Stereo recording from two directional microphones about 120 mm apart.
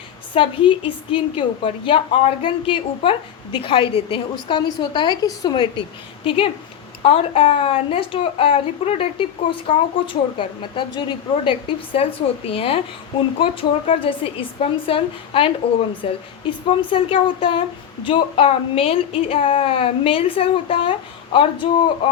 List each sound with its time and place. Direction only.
0.3 s a woman's voice: 45° left (ahead or behind)